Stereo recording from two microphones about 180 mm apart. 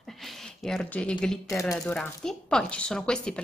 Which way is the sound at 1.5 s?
15° left (ahead or behind).